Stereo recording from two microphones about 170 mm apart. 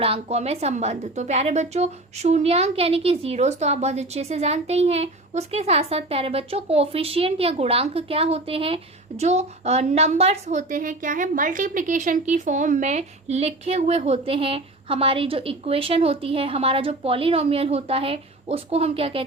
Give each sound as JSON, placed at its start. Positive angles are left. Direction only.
{"t": 0.0, "sound": "a woman's voice", "side_deg": -35}